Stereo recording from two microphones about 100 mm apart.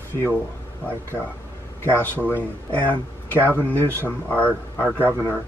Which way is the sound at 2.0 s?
20° left (ahead or behind).